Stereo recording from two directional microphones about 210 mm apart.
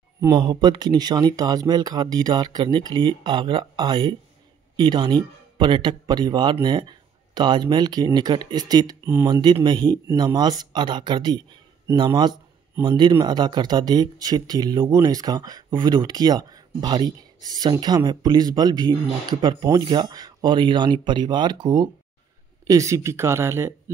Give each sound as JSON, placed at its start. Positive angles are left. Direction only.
{"t": 0.2, "sound": "speech", "side_deg": -20}